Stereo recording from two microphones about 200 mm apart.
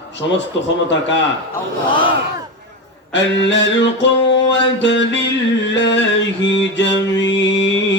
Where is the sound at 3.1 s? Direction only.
65° left (ahead or behind).